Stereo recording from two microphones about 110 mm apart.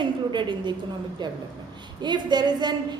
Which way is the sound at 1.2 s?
45° right (ahead or behind).